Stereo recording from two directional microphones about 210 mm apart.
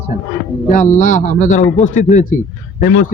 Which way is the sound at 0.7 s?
40° left (ahead or behind).